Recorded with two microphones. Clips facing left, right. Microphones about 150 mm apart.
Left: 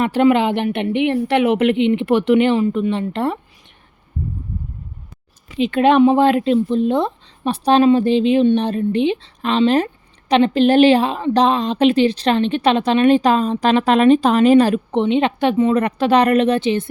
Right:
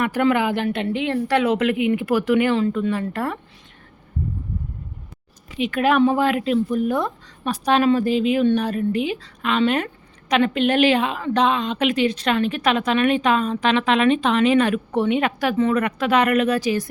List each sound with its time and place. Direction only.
0.0 s speech: 25° left (ahead or behind)
5.5 s a woman's voice: 30° left (ahead or behind)
14.9 s speech: 25° left (ahead or behind)
15.7 s a woman's voice: 35° left (ahead or behind)